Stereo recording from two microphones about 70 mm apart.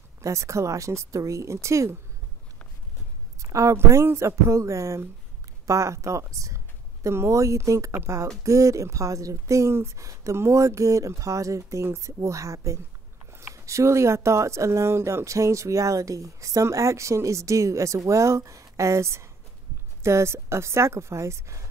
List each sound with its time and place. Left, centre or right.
0.2 s speech: right
3.3 s speech: right